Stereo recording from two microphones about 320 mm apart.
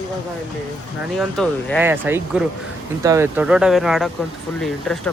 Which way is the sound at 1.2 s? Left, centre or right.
Centre.